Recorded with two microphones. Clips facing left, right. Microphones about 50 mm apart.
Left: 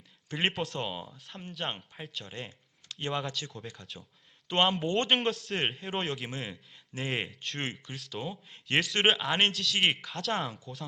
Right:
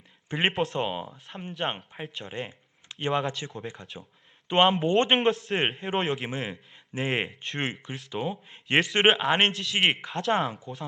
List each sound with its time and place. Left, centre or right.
0.3 s speech: right
0.5 s speech: centre
0.8 s speech: right
2.4 s a sound: right
3.2 s speech: right
5.7 s speech: centre
6.1 s speech: right
6.4 s speech: centre
7.5 s speech: right
9.2 s speech: centre
10.6 s speech: centre